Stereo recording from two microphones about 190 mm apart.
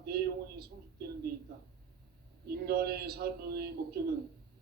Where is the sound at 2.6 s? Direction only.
55° right (ahead or behind).